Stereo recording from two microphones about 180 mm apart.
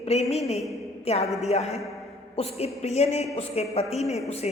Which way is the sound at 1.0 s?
35° left (ahead or behind).